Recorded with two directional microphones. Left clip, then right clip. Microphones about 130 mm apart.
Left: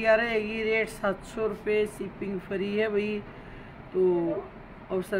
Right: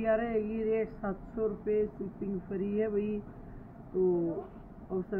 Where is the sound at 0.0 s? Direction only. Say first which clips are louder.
Left 6 dB; 20° left (ahead or behind).